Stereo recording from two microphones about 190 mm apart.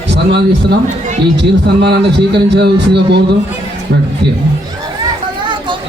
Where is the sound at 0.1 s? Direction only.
60° right (ahead or behind).